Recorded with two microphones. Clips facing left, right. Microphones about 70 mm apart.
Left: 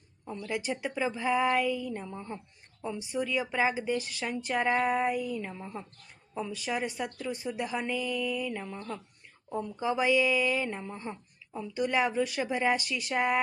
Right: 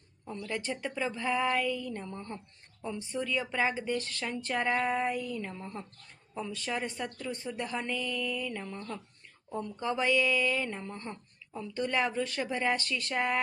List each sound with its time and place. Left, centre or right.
0.4 s speech: centre